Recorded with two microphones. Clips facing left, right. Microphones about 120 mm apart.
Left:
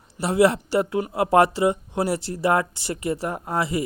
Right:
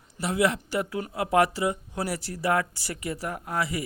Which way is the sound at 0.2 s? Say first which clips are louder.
Left 6 dB; 30° left (ahead or behind).